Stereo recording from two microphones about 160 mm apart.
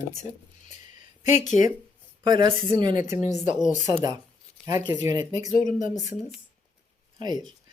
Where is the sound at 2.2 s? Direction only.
30° right (ahead or behind).